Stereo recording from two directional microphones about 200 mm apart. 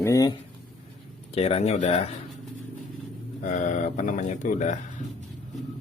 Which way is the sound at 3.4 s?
40° left (ahead or behind).